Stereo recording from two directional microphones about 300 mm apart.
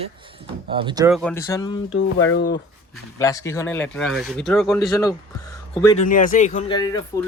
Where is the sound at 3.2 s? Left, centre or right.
Centre.